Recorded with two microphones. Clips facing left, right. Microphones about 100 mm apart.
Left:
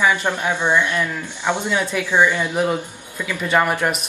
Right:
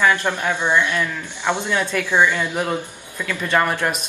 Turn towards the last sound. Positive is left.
turn(degrees=10)  # may be behind; listen again after turning